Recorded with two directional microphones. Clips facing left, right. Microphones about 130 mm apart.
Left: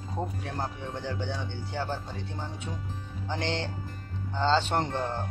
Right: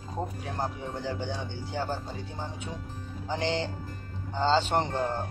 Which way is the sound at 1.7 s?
40° right (ahead or behind).